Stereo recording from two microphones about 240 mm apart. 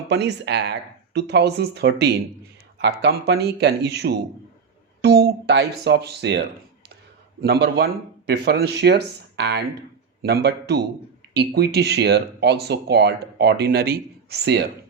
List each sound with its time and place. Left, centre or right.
0.1 s speech: right
5.0 s music: right
5.8 s speech: right
7.4 s speech: right